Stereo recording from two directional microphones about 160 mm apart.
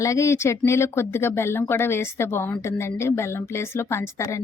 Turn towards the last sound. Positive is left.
turn(degrees=20)  # may be behind; listen again after turning